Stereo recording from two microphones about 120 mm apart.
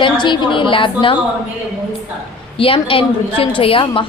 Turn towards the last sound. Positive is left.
turn(degrees=50)  # may be behind; listen again after turning